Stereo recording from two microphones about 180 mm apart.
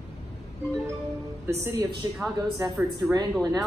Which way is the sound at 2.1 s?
Centre (ahead or behind).